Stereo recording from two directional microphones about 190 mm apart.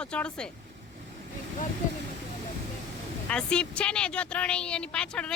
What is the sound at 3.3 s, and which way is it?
Speech, 5° left (ahead or behind).